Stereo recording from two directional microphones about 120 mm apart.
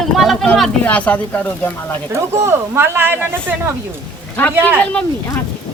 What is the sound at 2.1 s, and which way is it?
Speech, 25° right (ahead or behind).